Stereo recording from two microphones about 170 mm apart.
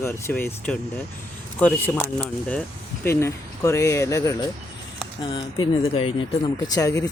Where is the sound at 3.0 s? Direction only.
15° left (ahead or behind).